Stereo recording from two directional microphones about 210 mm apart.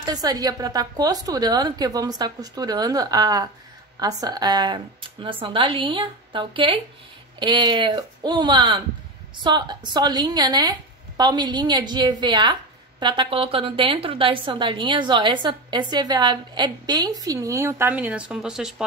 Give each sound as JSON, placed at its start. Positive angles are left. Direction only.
{"t": 0.0, "sound": "a woman's voice", "side_deg": -20}